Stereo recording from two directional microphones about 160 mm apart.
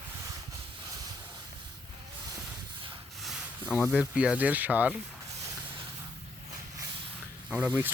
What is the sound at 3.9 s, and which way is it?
Speech, 5° right (ahead or behind).